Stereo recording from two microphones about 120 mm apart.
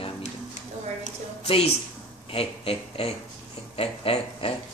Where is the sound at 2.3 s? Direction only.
55° left (ahead or behind).